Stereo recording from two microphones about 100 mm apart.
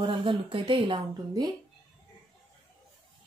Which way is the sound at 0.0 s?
60° right (ahead or behind).